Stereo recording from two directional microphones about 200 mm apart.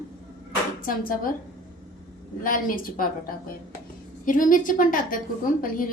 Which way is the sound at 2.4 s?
45° left (ahead or behind).